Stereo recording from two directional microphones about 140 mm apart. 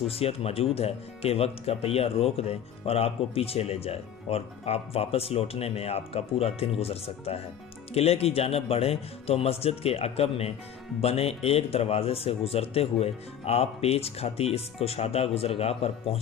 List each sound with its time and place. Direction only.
0.1 s speech: 45° left (ahead or behind)